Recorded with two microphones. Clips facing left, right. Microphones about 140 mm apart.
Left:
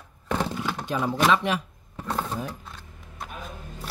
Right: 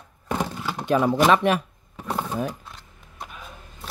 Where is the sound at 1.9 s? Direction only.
10° right (ahead or behind).